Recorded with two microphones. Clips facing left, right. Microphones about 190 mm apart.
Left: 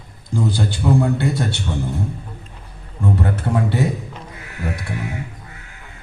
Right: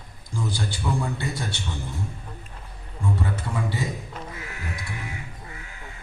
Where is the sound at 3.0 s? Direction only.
65° left (ahead or behind).